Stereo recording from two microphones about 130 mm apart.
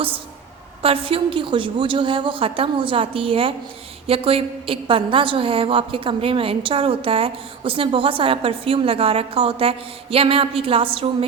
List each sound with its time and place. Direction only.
0.8 s a woman's voice: 45° right (ahead or behind)